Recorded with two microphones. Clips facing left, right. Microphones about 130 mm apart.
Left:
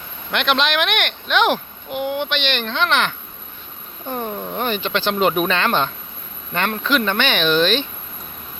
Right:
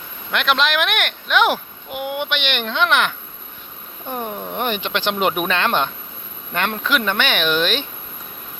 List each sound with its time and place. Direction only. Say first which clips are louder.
0.3 s speech: even; centre (ahead or behind)
4.1 s speech: left 1 dB; 10° right (ahead or behind)